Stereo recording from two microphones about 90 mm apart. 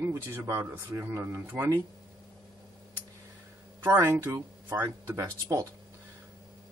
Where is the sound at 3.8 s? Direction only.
30° right (ahead or behind).